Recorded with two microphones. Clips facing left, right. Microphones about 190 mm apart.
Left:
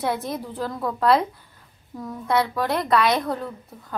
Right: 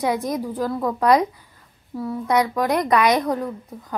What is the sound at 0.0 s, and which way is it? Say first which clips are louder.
A woman's voice: right 4 dB; 15° right (ahead or behind).